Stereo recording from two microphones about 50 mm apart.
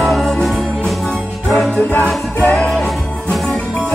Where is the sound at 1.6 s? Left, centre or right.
Left.